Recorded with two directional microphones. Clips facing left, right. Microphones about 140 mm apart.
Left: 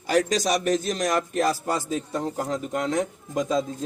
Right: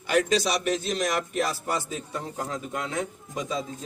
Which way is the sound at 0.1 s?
40° left (ahead or behind).